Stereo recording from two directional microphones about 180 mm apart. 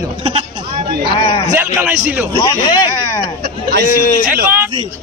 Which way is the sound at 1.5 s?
10° right (ahead or behind).